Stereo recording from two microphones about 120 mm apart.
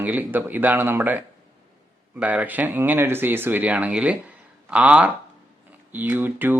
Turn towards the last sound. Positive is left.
turn(degrees=-15)  # may be behind; listen again after turning